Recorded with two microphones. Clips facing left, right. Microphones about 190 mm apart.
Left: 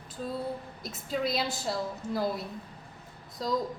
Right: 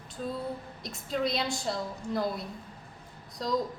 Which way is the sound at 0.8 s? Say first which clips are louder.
Right 1 dB; 5° left (ahead or behind).